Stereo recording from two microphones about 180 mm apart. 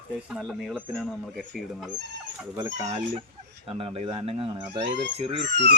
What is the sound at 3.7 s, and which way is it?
Speech, 30° right (ahead or behind).